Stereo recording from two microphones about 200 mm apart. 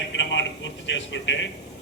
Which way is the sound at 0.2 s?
65° left (ahead or behind).